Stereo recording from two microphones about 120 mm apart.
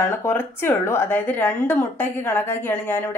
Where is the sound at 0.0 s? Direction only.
20° left (ahead or behind).